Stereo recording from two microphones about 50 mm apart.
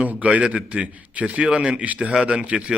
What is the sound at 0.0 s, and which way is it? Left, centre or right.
A man's voice, right.